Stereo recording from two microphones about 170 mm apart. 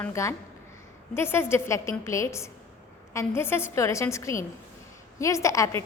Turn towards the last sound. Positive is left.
turn(degrees=15)  # may be behind; listen again after turning